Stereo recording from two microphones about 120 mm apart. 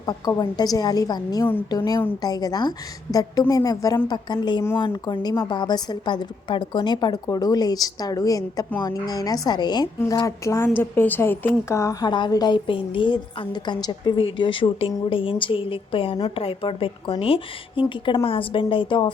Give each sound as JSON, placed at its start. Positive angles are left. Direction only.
{"t": 0.0, "sound": "a woman's voice", "side_deg": 35}